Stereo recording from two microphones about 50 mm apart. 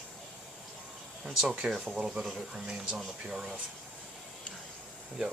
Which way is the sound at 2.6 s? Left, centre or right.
Centre.